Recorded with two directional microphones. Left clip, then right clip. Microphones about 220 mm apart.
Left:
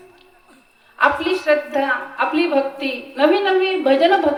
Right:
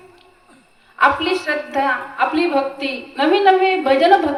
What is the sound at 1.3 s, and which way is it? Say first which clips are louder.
A woman's voice: left 2 dB; 30° right (ahead or behind).